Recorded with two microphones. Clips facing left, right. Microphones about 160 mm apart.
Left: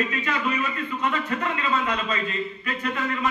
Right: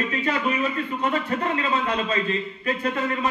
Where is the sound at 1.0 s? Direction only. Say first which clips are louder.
Right 1 dB; 30° right (ahead or behind).